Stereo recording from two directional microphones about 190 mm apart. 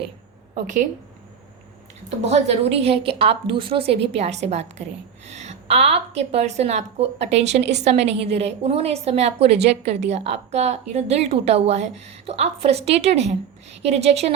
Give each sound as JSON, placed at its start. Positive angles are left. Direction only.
{"t": 2.0, "sound": "a woman's voice", "side_deg": -35}